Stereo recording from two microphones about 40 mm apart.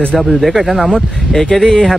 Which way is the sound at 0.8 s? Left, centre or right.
Centre.